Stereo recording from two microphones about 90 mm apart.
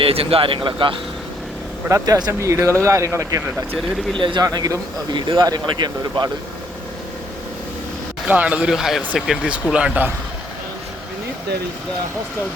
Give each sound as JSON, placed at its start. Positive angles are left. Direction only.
{"t": 0.0, "sound": "speech", "side_deg": -90}
{"t": 1.9, "sound": "speech", "side_deg": -45}
{"t": 2.4, "sound": "speech", "side_deg": -35}
{"t": 3.8, "sound": "speech", "side_deg": 0}
{"t": 4.2, "sound": "speech", "side_deg": -70}
{"t": 4.4, "sound": "speech", "side_deg": -45}
{"t": 8.3, "sound": "a man's voice", "side_deg": -15}